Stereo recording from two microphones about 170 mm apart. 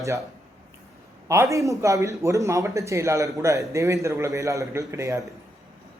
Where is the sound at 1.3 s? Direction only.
15° right (ahead or behind).